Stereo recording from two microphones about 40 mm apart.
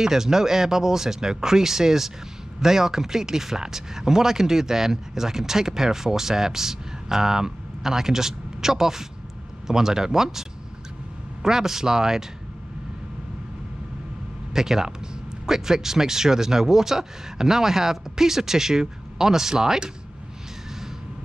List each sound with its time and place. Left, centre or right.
0.0 s speech: centre
11.4 s speech: centre
14.5 s speech: centre